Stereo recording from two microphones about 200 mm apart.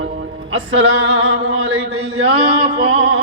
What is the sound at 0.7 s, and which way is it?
Speech, 70° right (ahead or behind).